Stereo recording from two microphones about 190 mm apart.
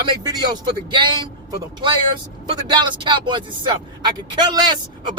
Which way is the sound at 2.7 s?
25° right (ahead or behind).